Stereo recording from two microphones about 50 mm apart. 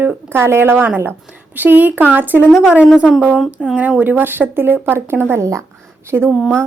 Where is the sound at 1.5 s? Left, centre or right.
Right.